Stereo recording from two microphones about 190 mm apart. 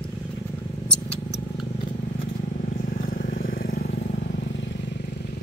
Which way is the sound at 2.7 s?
45° left (ahead or behind).